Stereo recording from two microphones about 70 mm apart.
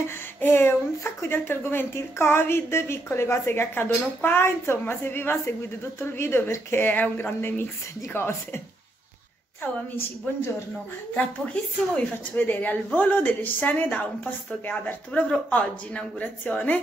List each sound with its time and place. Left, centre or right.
0.4 s speech: left
9.6 s speech: left
11.1 s speech: centre